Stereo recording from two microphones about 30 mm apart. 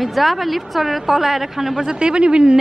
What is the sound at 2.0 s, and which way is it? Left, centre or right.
Speech, right.